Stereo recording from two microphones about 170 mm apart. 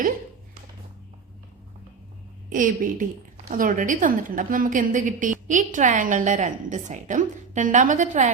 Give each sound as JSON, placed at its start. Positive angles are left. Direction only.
{"t": 2.5, "sound": "a woman's voice", "side_deg": -50}